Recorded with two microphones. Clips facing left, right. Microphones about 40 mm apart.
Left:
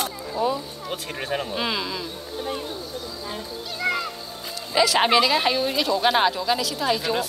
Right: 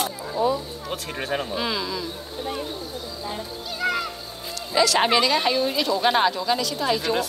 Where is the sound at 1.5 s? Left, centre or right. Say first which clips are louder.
Even; left.